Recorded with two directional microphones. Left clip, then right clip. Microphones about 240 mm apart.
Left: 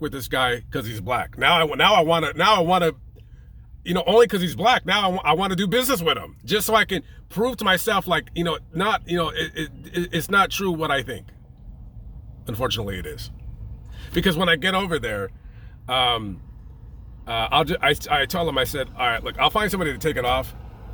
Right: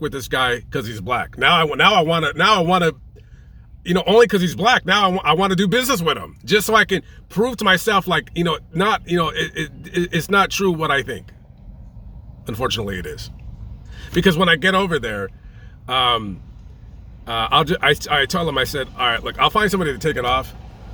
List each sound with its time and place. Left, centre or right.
0.0 s a man's voice: centre
12.5 s a man's voice: centre
20.6 s vehicle: right